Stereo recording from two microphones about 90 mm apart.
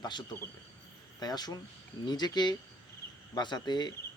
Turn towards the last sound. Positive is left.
turn(degrees=55)  # may be behind; listen again after turning